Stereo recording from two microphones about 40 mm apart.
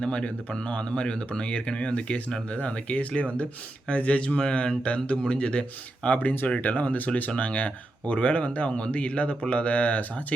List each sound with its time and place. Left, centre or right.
0.0 s speech: left
6.1 s speech: left